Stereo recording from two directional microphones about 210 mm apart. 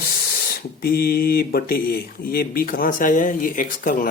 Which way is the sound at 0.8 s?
50° left (ahead or behind).